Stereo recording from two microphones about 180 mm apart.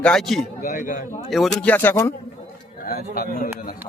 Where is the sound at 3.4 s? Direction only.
50° left (ahead or behind).